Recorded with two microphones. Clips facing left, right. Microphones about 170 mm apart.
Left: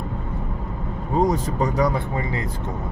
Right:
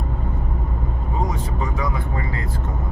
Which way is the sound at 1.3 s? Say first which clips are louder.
Left 5 dB; 40° left (ahead or behind).